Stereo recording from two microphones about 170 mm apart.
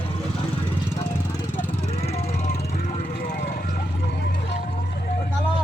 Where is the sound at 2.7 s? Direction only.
50° left (ahead or behind).